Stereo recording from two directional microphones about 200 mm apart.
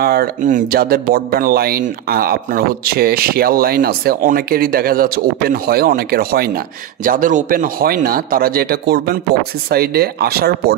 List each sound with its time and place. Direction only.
0.0 s speech: 50° right (ahead or behind)